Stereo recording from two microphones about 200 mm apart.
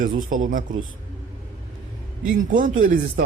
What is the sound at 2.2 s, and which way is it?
Speech, 40° right (ahead or behind).